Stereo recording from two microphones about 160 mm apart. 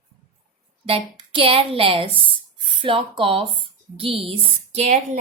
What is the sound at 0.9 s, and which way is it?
Speech, 35° right (ahead or behind).